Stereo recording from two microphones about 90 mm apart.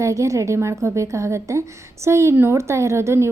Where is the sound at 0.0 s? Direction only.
35° right (ahead or behind).